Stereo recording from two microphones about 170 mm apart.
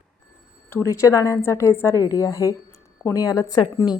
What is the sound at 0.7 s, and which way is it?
A woman's voice, 15° left (ahead or behind).